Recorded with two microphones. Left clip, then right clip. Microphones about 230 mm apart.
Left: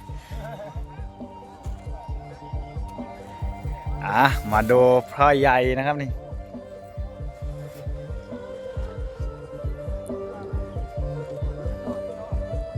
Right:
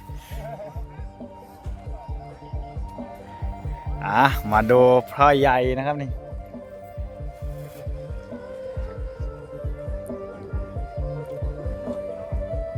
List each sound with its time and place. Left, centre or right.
0.4 s music: left
4.0 s speech: centre
10.1 s music: left
11.8 s music: left